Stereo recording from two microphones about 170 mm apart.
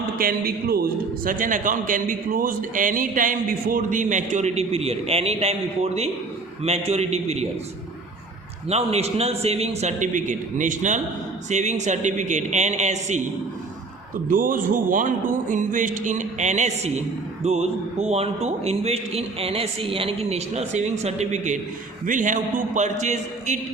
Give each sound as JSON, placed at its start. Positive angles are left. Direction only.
{"t": 0.2, "sound": "a man's voice", "side_deg": -60}
{"t": 8.7, "sound": "a man's voice", "side_deg": -40}
{"t": 14.3, "sound": "a man's voice", "side_deg": -55}